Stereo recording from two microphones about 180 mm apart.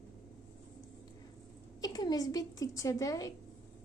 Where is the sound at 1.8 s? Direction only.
20° left (ahead or behind).